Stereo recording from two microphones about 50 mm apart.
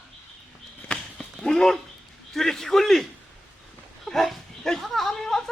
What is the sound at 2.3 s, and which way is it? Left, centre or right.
Speech, centre.